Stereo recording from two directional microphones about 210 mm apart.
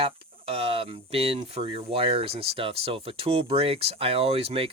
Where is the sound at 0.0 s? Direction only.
25° right (ahead or behind).